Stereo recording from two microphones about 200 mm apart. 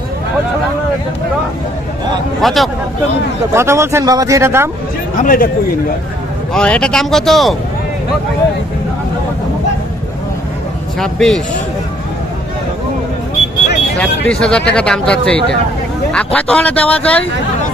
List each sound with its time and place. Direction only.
2.4 s speech: centre (ahead or behind)
3.5 s speech: 15° right (ahead or behind)
5.2 s speech: 45° left (ahead or behind)
6.5 s speech: 5° left (ahead or behind)
11.0 s speech: centre (ahead or behind)
14.2 s speech: 5° left (ahead or behind)